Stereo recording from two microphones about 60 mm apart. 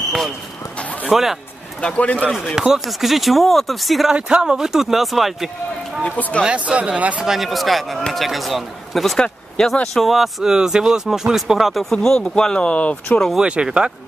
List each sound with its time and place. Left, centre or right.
1.1 s speech: centre
1.8 s speech: centre
2.3 s speech: centre
4.1 s speech: centre
6.0 s speech: left
6.4 s speech: centre
7.2 s speech: centre; by 13.2 s left
13.4 s speech: centre